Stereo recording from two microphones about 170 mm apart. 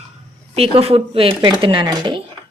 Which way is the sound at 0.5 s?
35° right (ahead or behind).